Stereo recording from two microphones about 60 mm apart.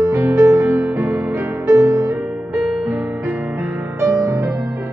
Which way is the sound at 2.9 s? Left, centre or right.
Right.